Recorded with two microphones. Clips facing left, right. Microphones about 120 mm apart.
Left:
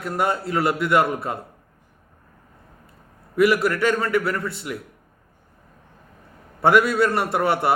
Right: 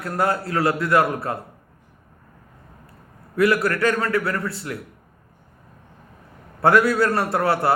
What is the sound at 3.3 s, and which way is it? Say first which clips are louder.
A man's voice: left 1 dB; centre (ahead or behind).